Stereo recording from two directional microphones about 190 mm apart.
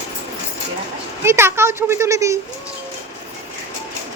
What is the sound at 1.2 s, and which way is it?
A child's voice, 15° right (ahead or behind).